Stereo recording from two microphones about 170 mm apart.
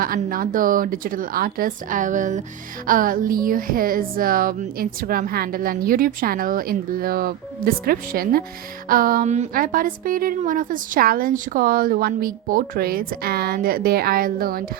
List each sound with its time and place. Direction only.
0.0 s speech: 55° right (ahead or behind)